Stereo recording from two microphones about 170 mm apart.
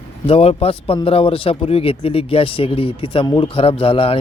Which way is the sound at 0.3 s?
35° left (ahead or behind).